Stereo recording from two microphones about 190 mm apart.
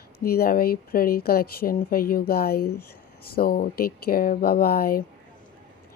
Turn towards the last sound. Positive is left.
turn(degrees=50)  # may be behind; listen again after turning